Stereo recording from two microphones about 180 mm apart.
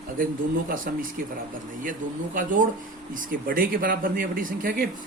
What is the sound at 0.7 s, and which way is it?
Speech, 50° right (ahead or behind).